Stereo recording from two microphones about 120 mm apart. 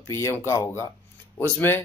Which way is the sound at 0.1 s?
20° left (ahead or behind).